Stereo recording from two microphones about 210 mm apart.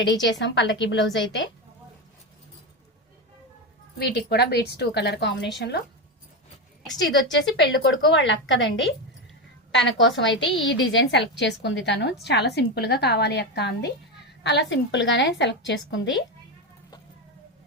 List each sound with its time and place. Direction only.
0.2 s a woman's voice: 60° left (ahead or behind)
3.9 s a woman's voice: 50° left (ahead or behind)
7.5 s a woman's voice: 60° left (ahead or behind)